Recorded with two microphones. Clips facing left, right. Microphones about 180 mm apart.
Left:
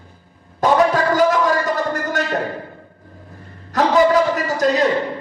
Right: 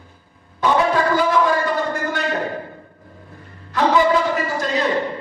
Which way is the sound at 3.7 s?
40° left (ahead or behind).